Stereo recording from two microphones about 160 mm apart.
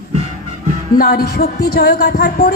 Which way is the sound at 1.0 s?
75° left (ahead or behind).